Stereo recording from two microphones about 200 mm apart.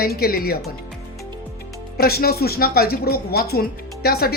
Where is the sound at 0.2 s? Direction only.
50° left (ahead or behind).